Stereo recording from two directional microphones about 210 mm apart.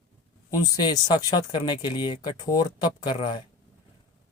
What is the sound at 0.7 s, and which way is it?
Speech, 20° left (ahead or behind).